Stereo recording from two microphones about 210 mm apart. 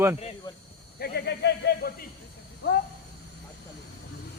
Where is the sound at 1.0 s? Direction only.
50° left (ahead or behind).